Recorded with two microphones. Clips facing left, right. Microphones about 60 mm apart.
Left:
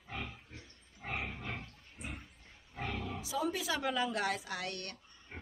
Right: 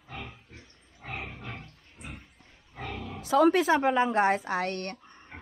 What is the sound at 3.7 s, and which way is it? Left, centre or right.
A woman's voice, right.